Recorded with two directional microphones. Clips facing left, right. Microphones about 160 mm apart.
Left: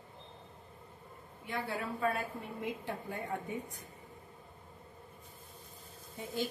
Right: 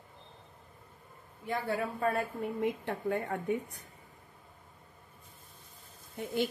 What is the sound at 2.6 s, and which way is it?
Speech, 65° right (ahead or behind).